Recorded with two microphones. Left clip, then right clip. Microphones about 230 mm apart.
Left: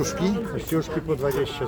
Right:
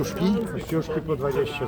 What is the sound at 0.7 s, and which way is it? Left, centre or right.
Speech, left.